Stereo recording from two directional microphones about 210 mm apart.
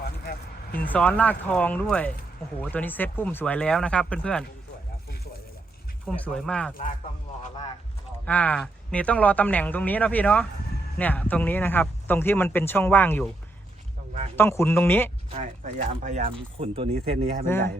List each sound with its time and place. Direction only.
0.9 s speech: 5° left (ahead or behind)
6.1 s speech: 5° left (ahead or behind)
8.2 s speech: 5° left (ahead or behind)
14.3 s speech: 10° left (ahead or behind)
15.3 s speech: 35° right (ahead or behind)
17.4 s speech: 10° left (ahead or behind)